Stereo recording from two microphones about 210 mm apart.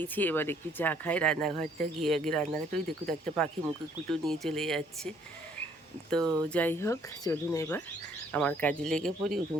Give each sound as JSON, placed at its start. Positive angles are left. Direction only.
{"t": 0.0, "sound": "speech", "side_deg": 10}
{"t": 1.5, "sound": "speech", "side_deg": -35}
{"t": 1.8, "sound": "speech", "side_deg": 0}